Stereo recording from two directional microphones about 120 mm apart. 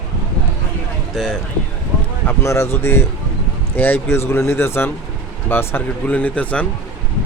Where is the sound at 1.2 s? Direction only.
5° left (ahead or behind).